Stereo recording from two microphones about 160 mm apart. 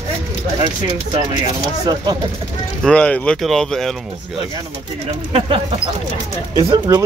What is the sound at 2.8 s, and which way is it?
Speech, 10° left (ahead or behind).